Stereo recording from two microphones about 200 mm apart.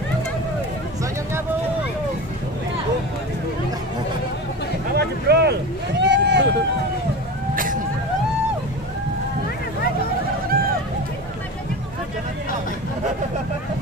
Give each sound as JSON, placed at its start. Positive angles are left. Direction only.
{"t": 4.9, "sound": "vehicle", "side_deg": -55}
{"t": 10.5, "sound": "hubbub", "side_deg": -45}